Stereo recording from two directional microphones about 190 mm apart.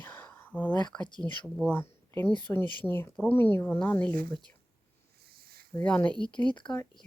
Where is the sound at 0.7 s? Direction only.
20° left (ahead or behind).